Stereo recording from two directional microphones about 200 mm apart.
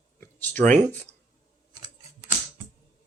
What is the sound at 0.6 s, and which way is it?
Speech, 10° left (ahead or behind).